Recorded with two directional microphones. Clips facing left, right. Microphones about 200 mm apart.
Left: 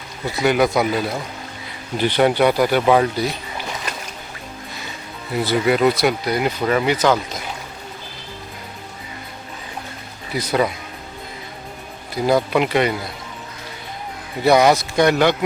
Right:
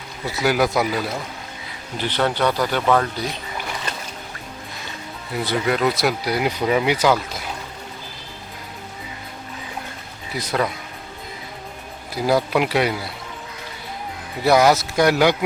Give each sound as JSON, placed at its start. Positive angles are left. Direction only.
{"t": 0.3, "sound": "speech", "side_deg": 0}
{"t": 2.0, "sound": "speech", "side_deg": 15}
{"t": 5.4, "sound": "speech", "side_deg": 5}
{"t": 10.3, "sound": "speech", "side_deg": 0}
{"t": 12.1, "sound": "speech", "side_deg": -5}
{"t": 14.4, "sound": "speech", "side_deg": 0}